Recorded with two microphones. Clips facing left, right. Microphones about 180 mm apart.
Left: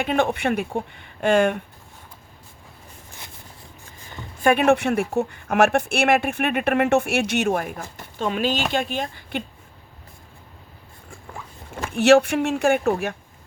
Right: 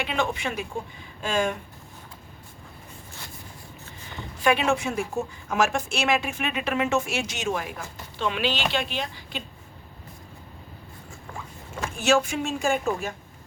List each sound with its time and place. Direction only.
0.0 s speech: 50° left (ahead or behind)
4.1 s speech: 50° left (ahead or behind)
11.9 s speech: 65° left (ahead or behind)